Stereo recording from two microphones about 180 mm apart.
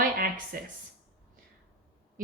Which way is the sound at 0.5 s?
55° right (ahead or behind).